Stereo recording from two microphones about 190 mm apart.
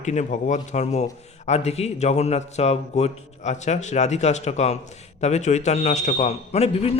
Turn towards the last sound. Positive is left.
turn(degrees=35)  # may be behind; listen again after turning